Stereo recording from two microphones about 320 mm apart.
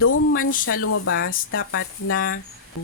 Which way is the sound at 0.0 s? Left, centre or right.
Left.